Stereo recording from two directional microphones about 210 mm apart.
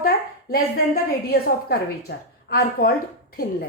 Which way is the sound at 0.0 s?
45° left (ahead or behind).